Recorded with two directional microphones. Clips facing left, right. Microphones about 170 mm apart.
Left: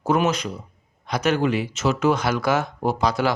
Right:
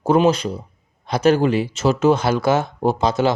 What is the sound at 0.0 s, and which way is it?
A man's voice, 30° right (ahead or behind).